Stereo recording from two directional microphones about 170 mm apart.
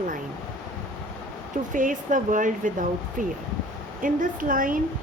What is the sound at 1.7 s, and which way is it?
Speech, 50° right (ahead or behind).